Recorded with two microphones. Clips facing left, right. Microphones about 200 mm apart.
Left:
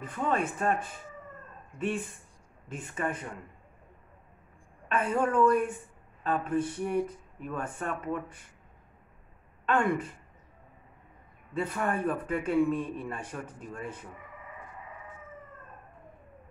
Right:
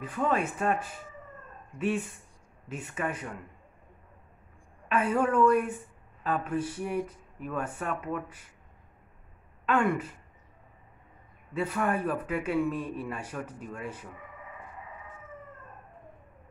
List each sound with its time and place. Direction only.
0.0 s speech: 10° right (ahead or behind)
4.8 s a woman's voice: 10° right (ahead or behind)
9.7 s speech: 10° right (ahead or behind)
11.8 s speech: 10° right (ahead or behind)